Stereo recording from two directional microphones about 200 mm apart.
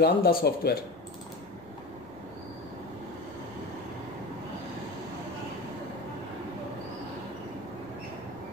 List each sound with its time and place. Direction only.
0.0 s speech: 50° left (ahead or behind)